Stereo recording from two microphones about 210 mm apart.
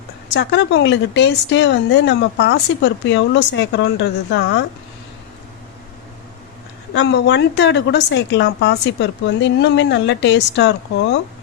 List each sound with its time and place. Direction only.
0.3 s speech: 55° left (ahead or behind)
6.9 s speech: 55° left (ahead or behind)